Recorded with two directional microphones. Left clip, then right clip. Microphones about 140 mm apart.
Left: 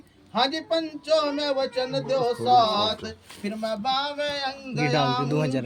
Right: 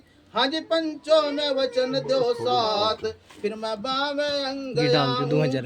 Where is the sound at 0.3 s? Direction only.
40° right (ahead or behind).